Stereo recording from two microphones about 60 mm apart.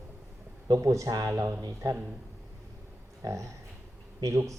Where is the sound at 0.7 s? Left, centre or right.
Right.